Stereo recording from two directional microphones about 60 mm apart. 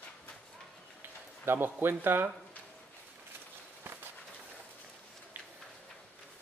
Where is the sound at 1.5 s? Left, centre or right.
Right.